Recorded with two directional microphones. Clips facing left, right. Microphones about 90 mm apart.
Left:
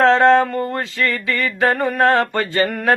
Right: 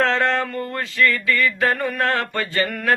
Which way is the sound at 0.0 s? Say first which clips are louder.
Left 8 dB; 25° left (ahead or behind).